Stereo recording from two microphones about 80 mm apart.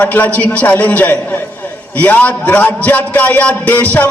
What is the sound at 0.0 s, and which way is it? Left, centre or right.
A man's voice, left.